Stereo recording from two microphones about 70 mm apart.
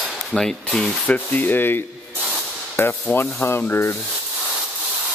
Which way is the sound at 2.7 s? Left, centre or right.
Left.